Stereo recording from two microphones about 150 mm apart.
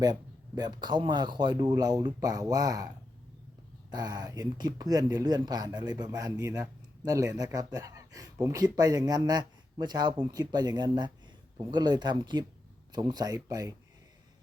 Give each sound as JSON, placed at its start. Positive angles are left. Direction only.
{"t": 0.0, "sound": "speech", "side_deg": -25}
{"t": 3.9, "sound": "speech", "side_deg": -25}